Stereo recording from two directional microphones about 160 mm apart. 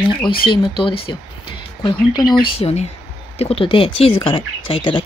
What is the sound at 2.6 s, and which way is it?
Speech, 45° left (ahead or behind).